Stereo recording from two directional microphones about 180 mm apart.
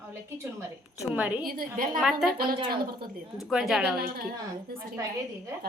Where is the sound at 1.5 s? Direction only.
50° right (ahead or behind).